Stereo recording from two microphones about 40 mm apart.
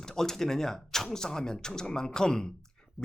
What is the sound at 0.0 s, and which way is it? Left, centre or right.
Speech, centre.